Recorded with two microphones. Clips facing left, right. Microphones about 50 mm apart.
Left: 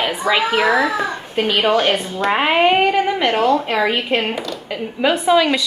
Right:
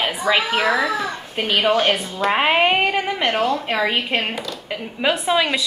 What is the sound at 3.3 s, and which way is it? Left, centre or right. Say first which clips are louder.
Speech: left 3 dB; left.